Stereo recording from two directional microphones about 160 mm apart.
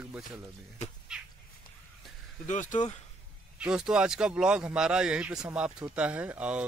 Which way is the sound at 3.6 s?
5° right (ahead or behind).